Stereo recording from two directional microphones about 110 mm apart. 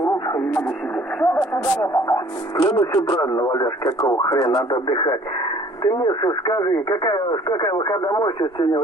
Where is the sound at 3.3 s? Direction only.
30° left (ahead or behind).